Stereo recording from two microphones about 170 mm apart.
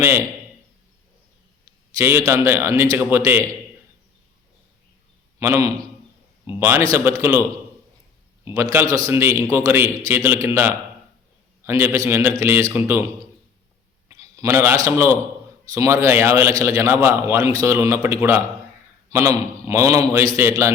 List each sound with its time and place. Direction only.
2.0 s a man's voice: 15° right (ahead or behind)
5.4 s a man's voice: 20° right (ahead or behind)
8.5 s a man's voice: 15° right (ahead or behind)